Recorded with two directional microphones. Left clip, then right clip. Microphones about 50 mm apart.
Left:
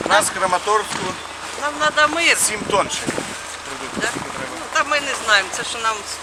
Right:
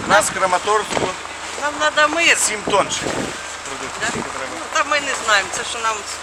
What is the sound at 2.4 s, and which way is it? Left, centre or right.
Speech, centre.